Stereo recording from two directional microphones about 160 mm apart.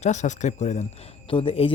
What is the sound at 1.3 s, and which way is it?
Speech, 35° left (ahead or behind).